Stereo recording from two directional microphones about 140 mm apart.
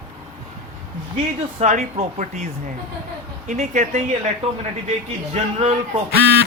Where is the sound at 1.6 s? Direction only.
60° right (ahead or behind).